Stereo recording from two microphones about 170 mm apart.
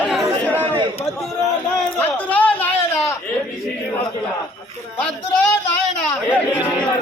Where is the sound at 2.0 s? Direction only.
10° left (ahead or behind).